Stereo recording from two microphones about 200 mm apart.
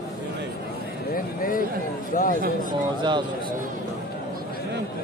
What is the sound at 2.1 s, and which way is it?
Speech, 40° left (ahead or behind).